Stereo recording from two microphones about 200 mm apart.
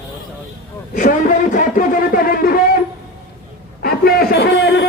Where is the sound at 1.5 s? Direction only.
45° left (ahead or behind).